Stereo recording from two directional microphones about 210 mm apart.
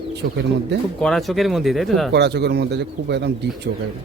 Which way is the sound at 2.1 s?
55° right (ahead or behind).